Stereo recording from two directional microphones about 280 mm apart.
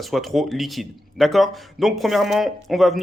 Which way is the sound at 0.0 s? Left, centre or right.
Centre.